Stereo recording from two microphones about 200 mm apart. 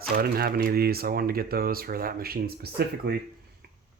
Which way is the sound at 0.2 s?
50° right (ahead or behind).